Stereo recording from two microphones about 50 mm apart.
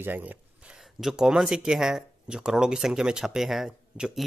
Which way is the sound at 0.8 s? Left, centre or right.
Centre.